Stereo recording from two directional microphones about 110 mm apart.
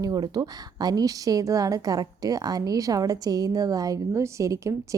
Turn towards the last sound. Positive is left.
turn(degrees=-30)  # may be behind; listen again after turning